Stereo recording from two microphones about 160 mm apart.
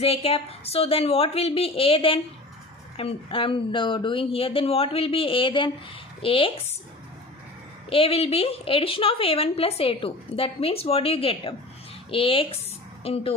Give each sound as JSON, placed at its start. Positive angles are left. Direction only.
{"t": 0.0, "sound": "a woman's voice", "side_deg": 35}
{"t": 7.9, "sound": "a woman's voice", "side_deg": 35}